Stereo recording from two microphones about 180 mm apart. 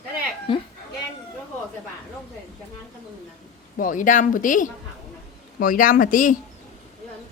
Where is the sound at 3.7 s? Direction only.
50° left (ahead or behind).